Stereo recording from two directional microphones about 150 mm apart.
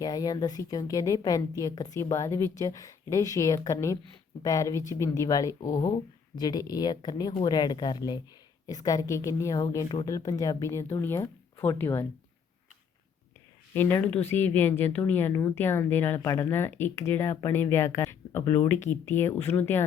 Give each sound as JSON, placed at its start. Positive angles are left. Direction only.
{"t": 0.0, "sound": "a woman's voice", "side_deg": 25}
{"t": 13.7, "sound": "speech", "side_deg": 15}